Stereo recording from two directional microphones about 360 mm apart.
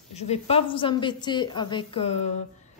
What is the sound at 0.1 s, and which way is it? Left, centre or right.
A woman's voice, centre.